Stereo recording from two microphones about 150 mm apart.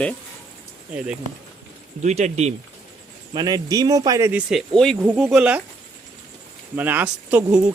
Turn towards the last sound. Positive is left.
turn(degrees=-10)  # may be behind; listen again after turning